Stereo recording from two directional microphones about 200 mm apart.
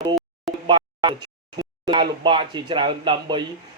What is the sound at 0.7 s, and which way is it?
A man's voice, 25° right (ahead or behind).